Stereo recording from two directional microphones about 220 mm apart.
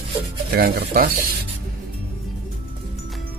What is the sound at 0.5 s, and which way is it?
Speech, 45° right (ahead or behind).